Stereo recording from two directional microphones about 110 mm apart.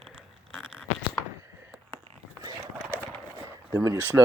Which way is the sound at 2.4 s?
35° right (ahead or behind).